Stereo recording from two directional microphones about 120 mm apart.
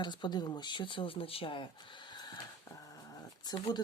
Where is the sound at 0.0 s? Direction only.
40° left (ahead or behind).